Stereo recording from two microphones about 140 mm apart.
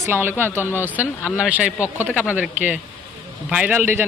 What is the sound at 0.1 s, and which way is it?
A man's voice, 15° right (ahead or behind).